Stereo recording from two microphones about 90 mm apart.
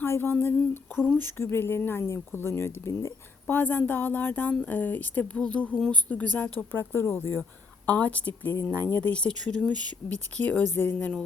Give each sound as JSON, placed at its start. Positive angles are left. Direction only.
{"t": 0.0, "sound": "speech", "side_deg": 25}